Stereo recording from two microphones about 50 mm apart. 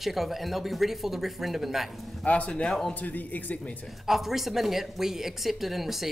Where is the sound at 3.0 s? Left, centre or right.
Left.